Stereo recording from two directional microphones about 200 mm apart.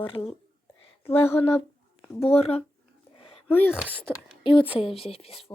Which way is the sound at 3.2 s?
30° left (ahead or behind).